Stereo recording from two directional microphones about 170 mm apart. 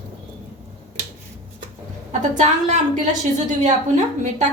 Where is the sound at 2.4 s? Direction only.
45° right (ahead or behind).